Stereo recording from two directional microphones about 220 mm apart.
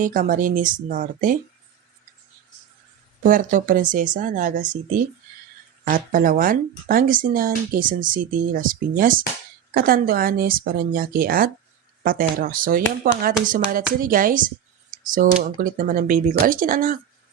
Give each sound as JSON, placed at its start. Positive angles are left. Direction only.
{"t": 0.0, "sound": "speech", "side_deg": -40}
{"t": 3.2, "sound": "speech", "side_deg": -35}